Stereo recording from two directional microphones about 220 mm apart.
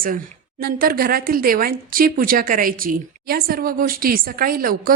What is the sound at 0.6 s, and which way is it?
A woman's voice, 40° right (ahead or behind).